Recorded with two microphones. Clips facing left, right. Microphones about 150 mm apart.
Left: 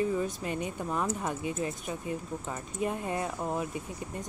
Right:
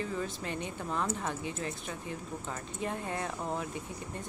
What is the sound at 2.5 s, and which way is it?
Speech, 15° left (ahead or behind).